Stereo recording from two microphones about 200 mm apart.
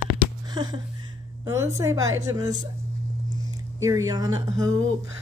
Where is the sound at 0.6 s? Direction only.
20° right (ahead or behind).